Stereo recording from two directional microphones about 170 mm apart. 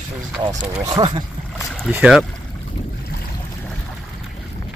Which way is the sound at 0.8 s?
25° right (ahead or behind).